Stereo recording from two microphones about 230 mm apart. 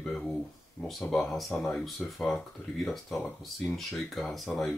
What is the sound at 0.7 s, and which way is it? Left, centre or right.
Speech, centre.